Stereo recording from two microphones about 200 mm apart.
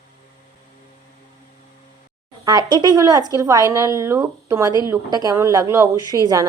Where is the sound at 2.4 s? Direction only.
20° right (ahead or behind).